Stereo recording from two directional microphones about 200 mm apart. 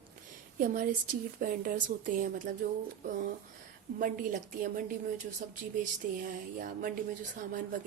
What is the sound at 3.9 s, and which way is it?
A woman's voice, 40° right (ahead or behind).